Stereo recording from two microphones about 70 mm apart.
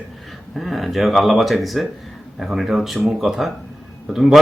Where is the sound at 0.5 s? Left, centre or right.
Centre.